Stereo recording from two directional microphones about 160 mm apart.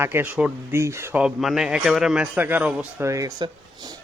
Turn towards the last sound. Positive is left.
turn(degrees=-25)  # may be behind; listen again after turning